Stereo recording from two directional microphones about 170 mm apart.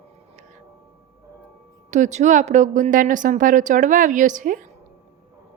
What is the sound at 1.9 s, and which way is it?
A woman's voice, 45° right (ahead or behind).